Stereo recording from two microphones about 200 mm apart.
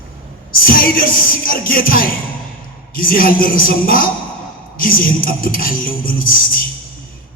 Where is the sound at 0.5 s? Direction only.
45° left (ahead or behind).